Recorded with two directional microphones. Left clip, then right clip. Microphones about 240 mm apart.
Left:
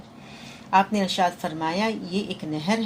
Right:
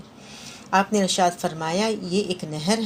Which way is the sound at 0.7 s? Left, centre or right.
Right.